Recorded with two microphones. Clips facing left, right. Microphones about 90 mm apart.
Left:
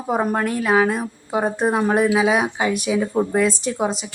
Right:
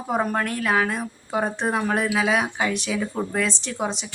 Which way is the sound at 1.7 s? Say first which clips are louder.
Left 7 dB; 20° left (ahead or behind).